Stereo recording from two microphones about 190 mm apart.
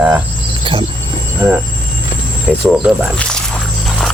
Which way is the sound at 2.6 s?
5° right (ahead or behind).